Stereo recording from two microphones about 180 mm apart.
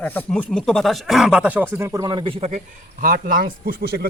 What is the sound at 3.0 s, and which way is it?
Speech, 50° right (ahead or behind).